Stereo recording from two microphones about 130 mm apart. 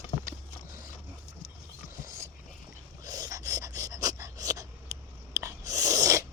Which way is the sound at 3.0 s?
30° right (ahead or behind).